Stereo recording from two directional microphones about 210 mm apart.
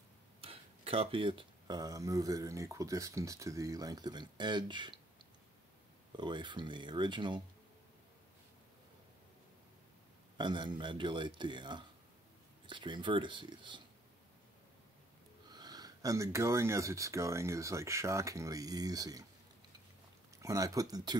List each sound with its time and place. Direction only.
0.4 s speech: 25° right (ahead or behind)
6.1 s speech: 20° right (ahead or behind)
10.3 s speech: 20° right (ahead or behind)
15.5 s speech: 20° right (ahead or behind)
20.4 s speech: 15° right (ahead or behind)